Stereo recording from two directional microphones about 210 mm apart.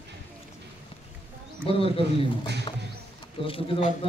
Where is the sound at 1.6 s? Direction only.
25° left (ahead or behind).